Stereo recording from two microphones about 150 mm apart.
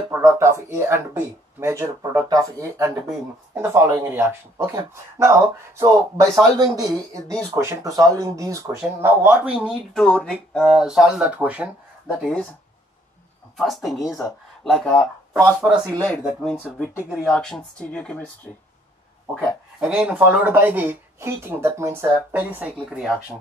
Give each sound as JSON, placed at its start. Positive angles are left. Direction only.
{"t": 0.1, "sound": "speech", "side_deg": -20}
{"t": 10.0, "sound": "speech", "side_deg": 5}
{"t": 12.2, "sound": "speech", "side_deg": 5}
{"t": 13.6, "sound": "speech", "side_deg": 0}
{"t": 15.3, "sound": "speech", "side_deg": -10}
{"t": 16.0, "sound": "speech", "side_deg": 5}
{"t": 19.8, "sound": "speech", "side_deg": -5}